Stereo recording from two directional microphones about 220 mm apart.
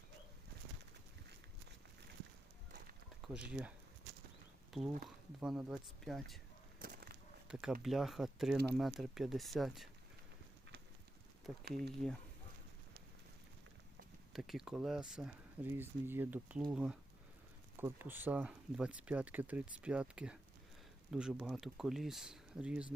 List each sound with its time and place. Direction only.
3.3 s speech: 5° right (ahead or behind)
4.7 s speech: centre (ahead or behind)
6.7 s a sound: 40° right (ahead or behind)
7.4 s speech: 5° right (ahead or behind)
11.5 s speech: centre (ahead or behind)
14.3 s speech: centre (ahead or behind)